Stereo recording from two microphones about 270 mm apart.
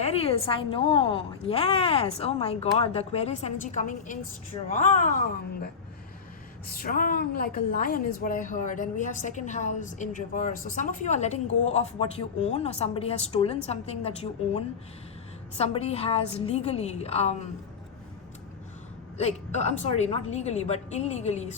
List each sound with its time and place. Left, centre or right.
0.0 s a woman's voice: left
6.7 s a woman's voice: left
19.1 s a man's voice: left